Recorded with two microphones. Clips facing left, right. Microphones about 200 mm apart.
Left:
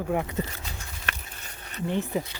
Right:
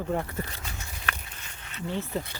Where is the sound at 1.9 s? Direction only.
15° left (ahead or behind).